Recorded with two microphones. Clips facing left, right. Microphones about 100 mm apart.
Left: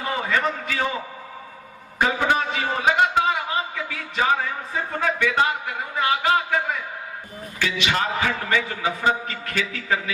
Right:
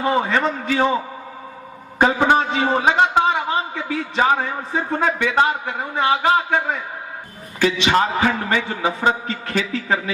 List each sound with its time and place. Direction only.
0.0 s a man's voice: 30° right (ahead or behind)
2.2 s a man's voice: 30° right (ahead or behind)